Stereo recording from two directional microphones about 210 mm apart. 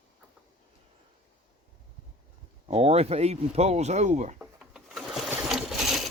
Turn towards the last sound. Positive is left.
turn(degrees=0)  # may be behind; listen again after turning